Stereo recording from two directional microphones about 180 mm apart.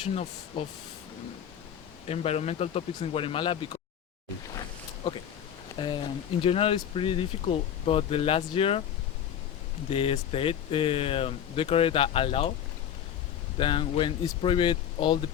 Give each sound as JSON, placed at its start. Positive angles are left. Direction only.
{"t": 0.6, "sound": "speech", "side_deg": 30}
{"t": 2.0, "sound": "speech", "side_deg": 35}
{"t": 5.7, "sound": "speech", "side_deg": 25}
{"t": 9.9, "sound": "speech", "side_deg": 30}
{"t": 13.6, "sound": "speech", "side_deg": 30}